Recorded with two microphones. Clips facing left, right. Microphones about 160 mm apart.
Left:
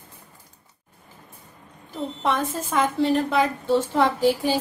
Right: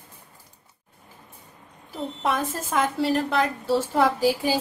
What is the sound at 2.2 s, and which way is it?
A woman's voice, centre (ahead or behind).